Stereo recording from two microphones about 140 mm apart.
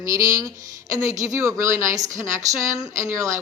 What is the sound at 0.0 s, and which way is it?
A woman's voice, 25° right (ahead or behind).